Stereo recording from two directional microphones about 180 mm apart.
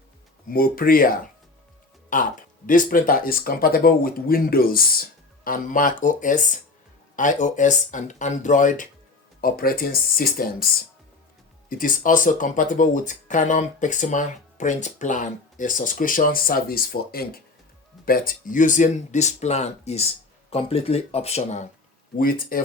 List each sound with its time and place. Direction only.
0.5 s speech: 55° left (ahead or behind)
11.7 s speech: 50° left (ahead or behind)
22.2 s speech: 50° left (ahead or behind)